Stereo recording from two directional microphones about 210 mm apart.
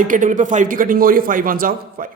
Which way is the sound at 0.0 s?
40° right (ahead or behind).